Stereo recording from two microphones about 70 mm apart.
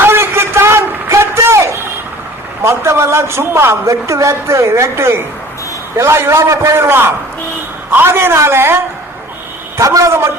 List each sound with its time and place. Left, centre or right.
0.0 s a sound: right
2.6 s a man's voice: right
9.7 s a woman's voice: right